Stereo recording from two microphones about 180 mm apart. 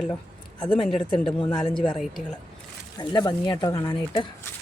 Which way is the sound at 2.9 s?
25° left (ahead or behind).